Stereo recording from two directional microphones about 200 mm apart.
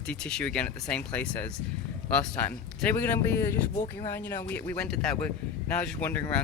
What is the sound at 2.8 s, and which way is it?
Speech, 10° left (ahead or behind).